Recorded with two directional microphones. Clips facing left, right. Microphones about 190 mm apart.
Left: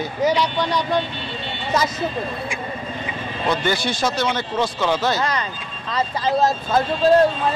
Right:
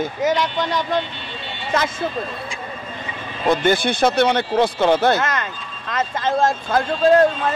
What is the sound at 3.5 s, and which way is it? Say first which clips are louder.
Speech: right 5 dB; 50° right (ahead or behind).